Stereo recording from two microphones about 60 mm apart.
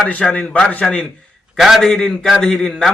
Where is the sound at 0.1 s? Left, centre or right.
Centre.